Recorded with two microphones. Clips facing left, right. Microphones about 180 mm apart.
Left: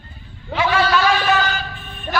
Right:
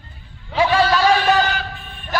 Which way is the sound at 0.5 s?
35° right (ahead or behind).